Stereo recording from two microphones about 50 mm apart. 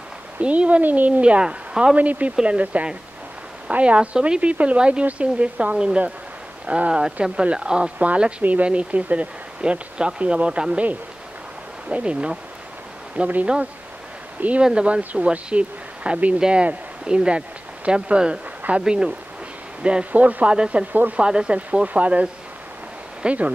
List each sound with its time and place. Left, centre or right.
0.4 s speech: right
1.7 s speech: centre
2.0 s speech: right
8.0 s speech: right
11.9 s speech: right
14.6 s speech: centre
20.1 s speech: right
20.5 s speech: centre